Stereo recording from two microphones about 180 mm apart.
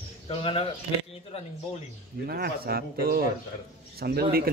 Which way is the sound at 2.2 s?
55° right (ahead or behind).